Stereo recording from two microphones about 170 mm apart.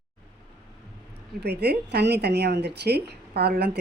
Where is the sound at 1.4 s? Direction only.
75° right (ahead or behind).